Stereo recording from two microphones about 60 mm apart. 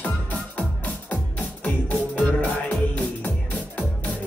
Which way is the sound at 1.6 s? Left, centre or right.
Left.